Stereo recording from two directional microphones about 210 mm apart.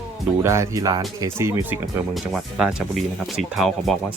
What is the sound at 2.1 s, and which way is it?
Speech, centre (ahead or behind).